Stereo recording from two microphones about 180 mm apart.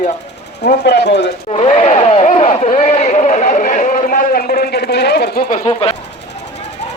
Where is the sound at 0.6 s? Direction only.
65° left (ahead or behind).